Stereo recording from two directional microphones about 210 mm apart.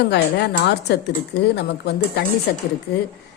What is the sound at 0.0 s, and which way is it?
Speech, 50° left (ahead or behind).